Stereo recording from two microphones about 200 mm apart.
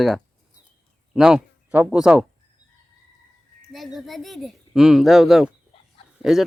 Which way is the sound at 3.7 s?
Centre (ahead or behind).